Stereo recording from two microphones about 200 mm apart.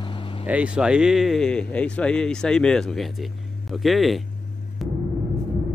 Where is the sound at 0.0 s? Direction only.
25° left (ahead or behind).